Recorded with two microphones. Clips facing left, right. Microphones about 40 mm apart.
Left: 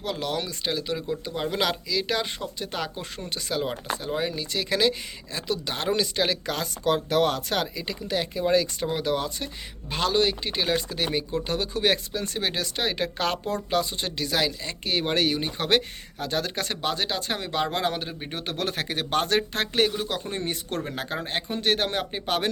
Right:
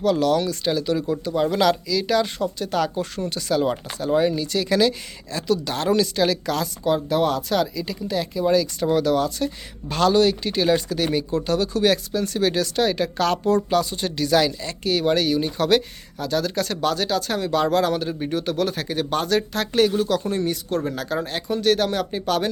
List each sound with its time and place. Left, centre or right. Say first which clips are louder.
0.0 s speech: right 10 dB; centre
6.8 s speech: right 2 dB; left
9.9 s speech: right 6 dB; centre
15.0 s speech: right 5 dB; left
16.8 s speech: right 5 dB; left
18.3 s speech: right 5 dB; left
20.0 s speech: right 8 dB; left